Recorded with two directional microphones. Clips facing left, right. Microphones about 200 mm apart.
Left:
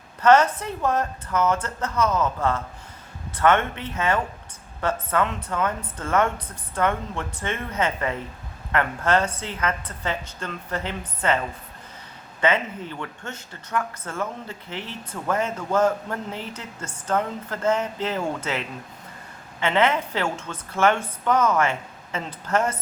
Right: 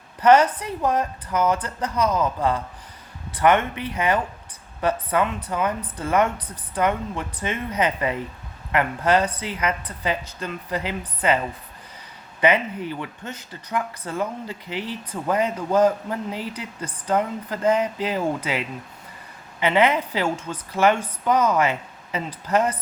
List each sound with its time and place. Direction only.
0.2 s a woman's voice: 10° right (ahead or behind)